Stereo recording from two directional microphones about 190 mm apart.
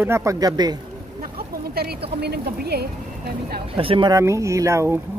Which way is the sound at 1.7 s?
55° right (ahead or behind).